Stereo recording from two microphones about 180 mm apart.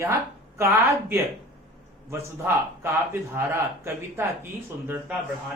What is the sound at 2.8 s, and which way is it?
Speech, 15° right (ahead or behind).